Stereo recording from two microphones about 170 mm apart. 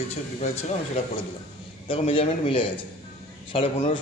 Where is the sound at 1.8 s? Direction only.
30° left (ahead or behind).